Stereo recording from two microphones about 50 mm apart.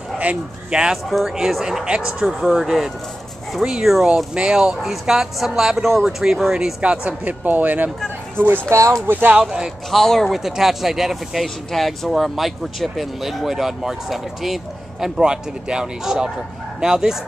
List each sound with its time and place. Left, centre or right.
0.2 s speech: right
1.1 s speech: centre
3.6 s speech: centre
6.8 s speech: right
7.2 s speech: right
8.6 s speech: right
9.0 s speech: right
9.4 s speech: centre
9.8 s speech: centre
10.3 s speech: centre
11.4 s speech: centre